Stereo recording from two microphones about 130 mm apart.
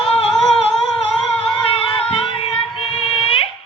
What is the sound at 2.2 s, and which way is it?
Child singing, 45° left (ahead or behind).